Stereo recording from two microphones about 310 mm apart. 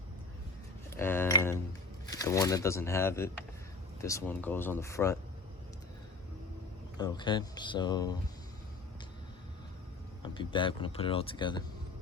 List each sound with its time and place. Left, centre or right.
0.9 s a sound: centre
2.0 s speech: centre
7.0 s speech: centre
10.2 s speech: centre